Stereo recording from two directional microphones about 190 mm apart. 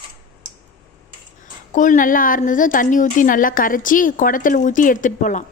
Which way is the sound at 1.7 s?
45° left (ahead or behind).